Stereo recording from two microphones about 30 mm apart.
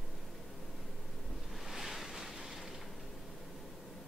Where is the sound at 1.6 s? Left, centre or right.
Centre.